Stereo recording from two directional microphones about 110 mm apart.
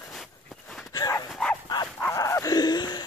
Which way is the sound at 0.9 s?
30° left (ahead or behind).